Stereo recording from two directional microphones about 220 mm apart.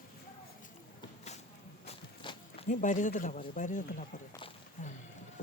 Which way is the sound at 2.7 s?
35° left (ahead or behind).